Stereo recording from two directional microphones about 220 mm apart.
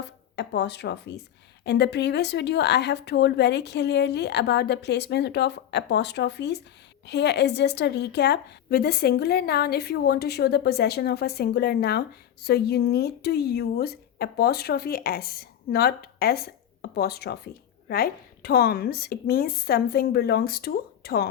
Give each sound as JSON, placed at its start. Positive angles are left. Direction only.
{"t": 0.3, "sound": "a woman's voice", "side_deg": 50}